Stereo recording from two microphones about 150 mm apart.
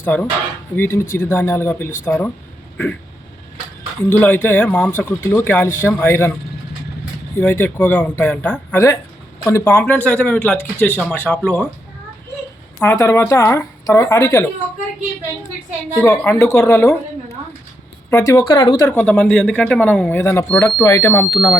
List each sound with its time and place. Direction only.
0.0 s dishes: 10° left (ahead or behind)
0.8 s speech: 15° left (ahead or behind)
4.1 s speech: 10° left (ahead or behind)
7.3 s speech: 15° left (ahead or behind)
12.8 s speech: 15° left (ahead or behind)
16.0 s speech: 15° left (ahead or behind)
18.1 s speech: 20° left (ahead or behind)
18.9 s speech: 10° left (ahead or behind)
21.3 s speech: centre (ahead or behind)